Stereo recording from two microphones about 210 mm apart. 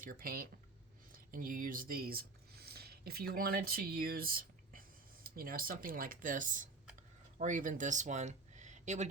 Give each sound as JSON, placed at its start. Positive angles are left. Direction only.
{"t": 0.0, "sound": "speech", "side_deg": -45}